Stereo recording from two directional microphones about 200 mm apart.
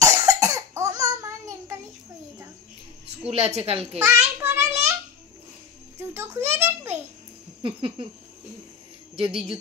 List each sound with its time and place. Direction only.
0.0 s cough: 15° right (ahead or behind)
3.3 s a woman's voice: 30° right (ahead or behind)
4.0 s a sound: 15° right (ahead or behind)
5.9 s a child's voice: 10° right (ahead or behind)
7.6 s a woman's voice: 25° right (ahead or behind)
9.1 s speech: 30° right (ahead or behind)